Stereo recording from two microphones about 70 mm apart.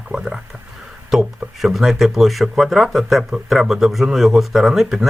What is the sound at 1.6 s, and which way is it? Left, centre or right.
Speech, centre.